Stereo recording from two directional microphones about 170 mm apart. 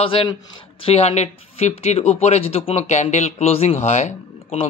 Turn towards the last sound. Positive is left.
turn(degrees=40)  # may be behind; listen again after turning